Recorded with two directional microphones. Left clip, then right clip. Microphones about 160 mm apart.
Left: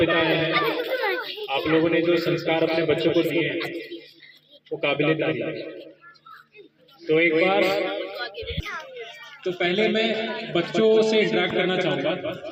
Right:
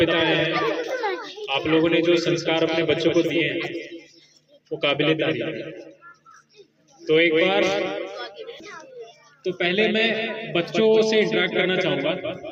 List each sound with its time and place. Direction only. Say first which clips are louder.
0.0 s a sound: right 1 dB; 10° left (ahead or behind)
0.6 s a sound: even; 20° right (ahead or behind)
1.5 s a man's voice: right 1 dB; 10° left (ahead or behind)
4.8 s a man's voice: right 1 dB; 10° left (ahead or behind)
7.1 s a man's voice: right 1 dB; 10° left (ahead or behind)
8.2 s a child's voice: left 4 dB; 40° right (ahead or behind)
9.4 s a man's voice: right 1 dB; 15° left (ahead or behind)